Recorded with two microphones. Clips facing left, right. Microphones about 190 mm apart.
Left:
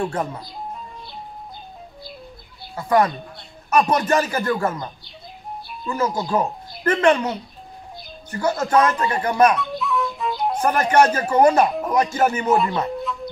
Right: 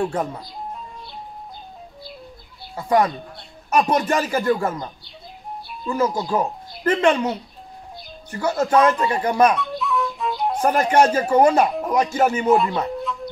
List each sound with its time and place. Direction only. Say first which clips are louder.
0.1 s speech: right 1 dB; 10° right (ahead or behind)
2.7 s speech: even; 15° right (ahead or behind)
5.9 s speech: right 1 dB; 10° right (ahead or behind)
9.6 s music: even; centre (ahead or behind)
10.8 s speech: even; 10° right (ahead or behind)
12.7 s music: even; centre (ahead or behind)